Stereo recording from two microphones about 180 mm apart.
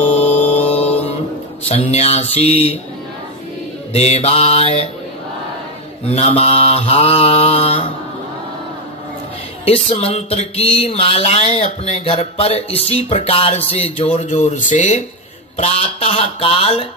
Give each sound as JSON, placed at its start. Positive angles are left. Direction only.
{"t": 0.1, "sound": "mantra", "side_deg": 35}
{"t": 1.8, "sound": "speech", "side_deg": 35}
{"t": 3.9, "sound": "speech", "side_deg": 35}
{"t": 6.0, "sound": "speech", "side_deg": 35}
{"t": 9.7, "sound": "speech", "side_deg": 35}